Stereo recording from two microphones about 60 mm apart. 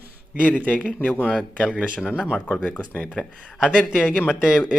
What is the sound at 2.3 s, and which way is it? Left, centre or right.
Speech, left.